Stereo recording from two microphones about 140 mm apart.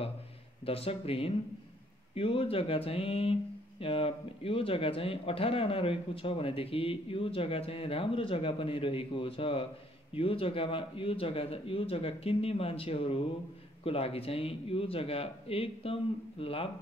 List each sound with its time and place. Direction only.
0.7 s a man's voice: 45° left (ahead or behind)